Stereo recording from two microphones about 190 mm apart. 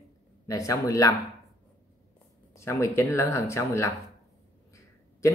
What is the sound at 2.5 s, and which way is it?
Speech, 15° left (ahead or behind).